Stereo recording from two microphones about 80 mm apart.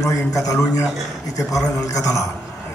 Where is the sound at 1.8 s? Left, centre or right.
Left.